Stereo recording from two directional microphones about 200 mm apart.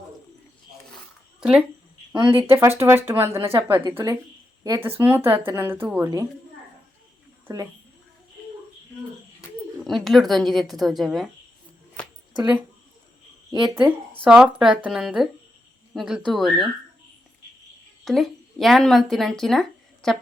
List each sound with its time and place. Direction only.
1.4 s speech: 5° right (ahead or behind)
2.1 s speech: 25° right (ahead or behind)
2.5 s speech: 10° right (ahead or behind)
7.4 s a woman's voice: 15° right (ahead or behind)
9.8 s a woman's voice: centre (ahead or behind)
13.5 s speech: 20° right (ahead or behind)
14.1 s a woman's voice: 5° right (ahead or behind)
18.0 s a woman's voice: centre (ahead or behind)